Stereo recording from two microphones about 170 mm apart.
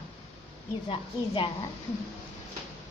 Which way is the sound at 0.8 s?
30° left (ahead or behind).